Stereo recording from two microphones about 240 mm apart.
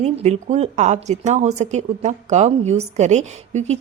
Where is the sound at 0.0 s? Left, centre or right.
Right.